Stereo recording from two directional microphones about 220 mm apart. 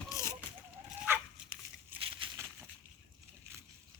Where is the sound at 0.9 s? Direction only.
10° right (ahead or behind).